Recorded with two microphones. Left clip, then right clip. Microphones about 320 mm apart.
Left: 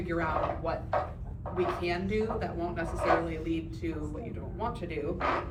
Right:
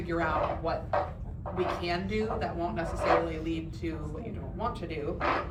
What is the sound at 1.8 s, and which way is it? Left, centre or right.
A woman's voice, centre.